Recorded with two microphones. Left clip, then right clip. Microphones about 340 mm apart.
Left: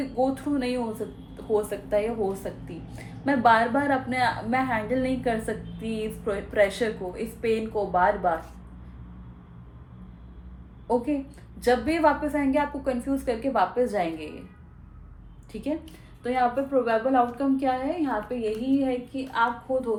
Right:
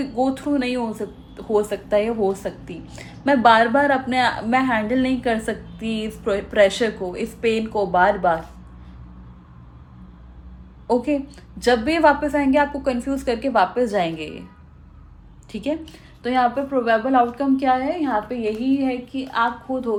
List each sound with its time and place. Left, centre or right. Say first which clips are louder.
0.2 s a woman's voice: right 4 dB; right
10.8 s a woman's voice: right 5 dB; right
15.5 s a woman's voice: right 5 dB; right